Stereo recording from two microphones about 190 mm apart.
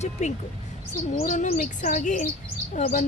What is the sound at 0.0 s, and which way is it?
Speech, 35° left (ahead or behind).